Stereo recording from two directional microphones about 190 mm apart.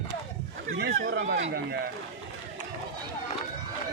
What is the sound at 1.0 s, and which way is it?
Speech, 75° right (ahead or behind).